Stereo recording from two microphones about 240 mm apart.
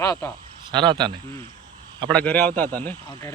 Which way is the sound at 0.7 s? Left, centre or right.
Centre.